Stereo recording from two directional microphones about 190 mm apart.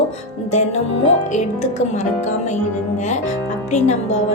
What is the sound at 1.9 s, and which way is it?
A child's voice, 40° left (ahead or behind).